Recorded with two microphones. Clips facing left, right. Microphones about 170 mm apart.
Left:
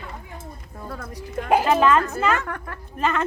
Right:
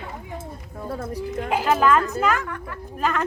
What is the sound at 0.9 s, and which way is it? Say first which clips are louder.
Speech: right 6 dB; 25° right (ahead or behind).